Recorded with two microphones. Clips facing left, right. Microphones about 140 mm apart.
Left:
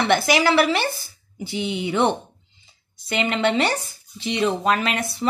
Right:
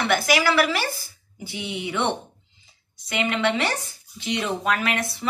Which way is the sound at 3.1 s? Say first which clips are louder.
Left 2 dB; 30° left (ahead or behind).